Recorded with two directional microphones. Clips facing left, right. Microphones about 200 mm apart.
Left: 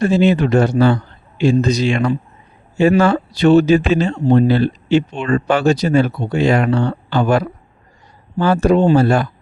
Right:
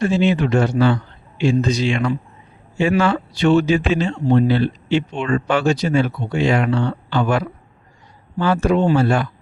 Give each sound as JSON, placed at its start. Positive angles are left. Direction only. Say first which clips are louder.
{"t": 0.0, "sound": "speech", "louder": "left 3 dB", "side_deg": 40}
{"t": 8.6, "sound": "speech", "louder": "left 4 dB", "side_deg": 35}